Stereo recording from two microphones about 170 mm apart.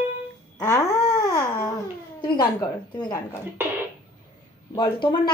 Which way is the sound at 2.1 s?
25° left (ahead or behind).